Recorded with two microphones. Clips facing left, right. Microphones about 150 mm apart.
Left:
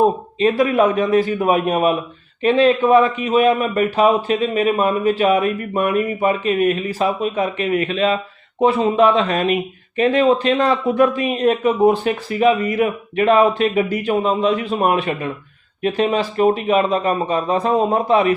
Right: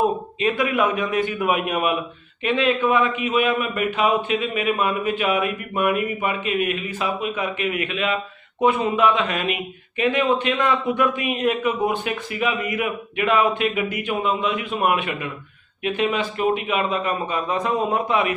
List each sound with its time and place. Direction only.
0.0 s a man's voice: 35° left (ahead or behind)